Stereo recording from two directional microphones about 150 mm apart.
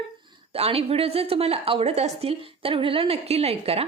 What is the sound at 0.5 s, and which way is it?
Speech, 40° right (ahead or behind).